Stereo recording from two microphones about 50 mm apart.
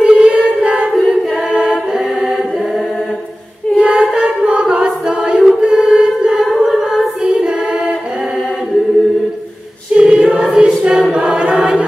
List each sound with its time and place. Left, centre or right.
0.0 s choir: right
1.5 s singing: centre
3.7 s a capella: centre
4.5 s choir: right
7.2 s choir: right
9.9 s choir: right